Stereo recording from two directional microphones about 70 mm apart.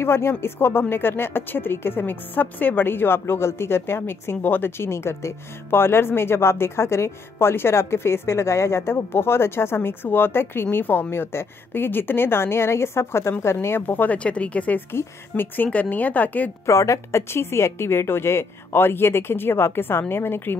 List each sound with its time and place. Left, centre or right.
0.0 s speech: left
14.9 s a woman's voice: left
16.6 s speech: left